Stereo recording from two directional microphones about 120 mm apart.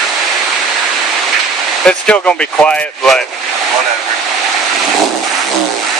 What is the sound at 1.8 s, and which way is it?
Speech, 10° left (ahead or behind).